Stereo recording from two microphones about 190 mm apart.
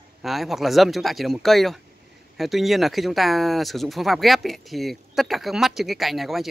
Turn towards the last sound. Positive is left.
turn(degrees=0)  # may be behind; listen again after turning